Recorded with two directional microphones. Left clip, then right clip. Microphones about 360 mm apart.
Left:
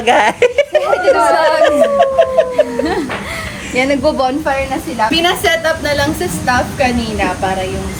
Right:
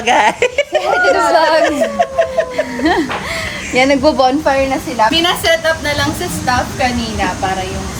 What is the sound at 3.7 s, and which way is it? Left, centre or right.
Speech, right.